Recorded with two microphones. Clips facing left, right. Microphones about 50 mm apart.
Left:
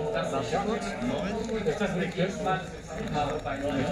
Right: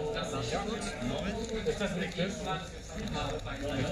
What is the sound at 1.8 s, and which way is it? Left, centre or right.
Speech, left.